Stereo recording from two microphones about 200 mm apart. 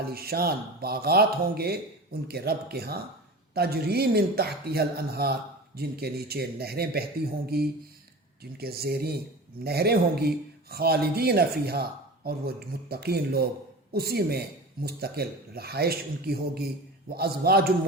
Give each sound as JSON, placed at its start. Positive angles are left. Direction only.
{"t": 0.0, "sound": "speech", "side_deg": -50}